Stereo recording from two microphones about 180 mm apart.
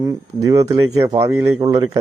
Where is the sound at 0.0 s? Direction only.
20° right (ahead or behind).